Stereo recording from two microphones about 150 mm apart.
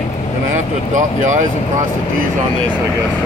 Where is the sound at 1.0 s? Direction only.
55° right (ahead or behind).